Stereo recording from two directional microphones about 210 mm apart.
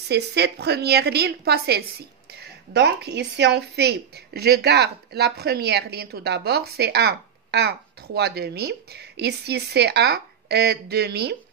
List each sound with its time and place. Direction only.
0.1 s a woman's voice: 55° right (ahead or behind)